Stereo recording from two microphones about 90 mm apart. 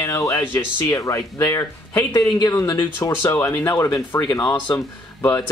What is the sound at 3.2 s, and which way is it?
Speech, 25° left (ahead or behind).